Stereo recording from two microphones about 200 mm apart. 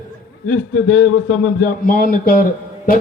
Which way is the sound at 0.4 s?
85° left.